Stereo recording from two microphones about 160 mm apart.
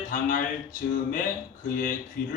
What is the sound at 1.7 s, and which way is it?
Speech, 60° left (ahead or behind).